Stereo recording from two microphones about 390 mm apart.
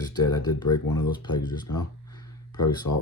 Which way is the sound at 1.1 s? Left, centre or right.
Centre.